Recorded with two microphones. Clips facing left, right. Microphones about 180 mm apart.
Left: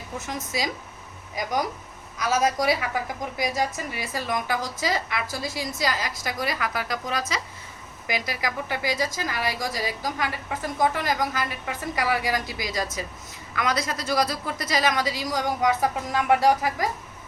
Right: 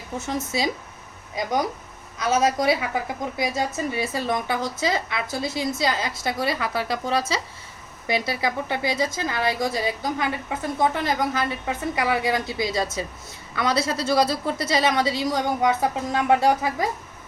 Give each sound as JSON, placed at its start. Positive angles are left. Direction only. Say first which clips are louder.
{"t": 0.5, "sound": "a woman's voice", "louder": "right 4 dB", "side_deg": -30}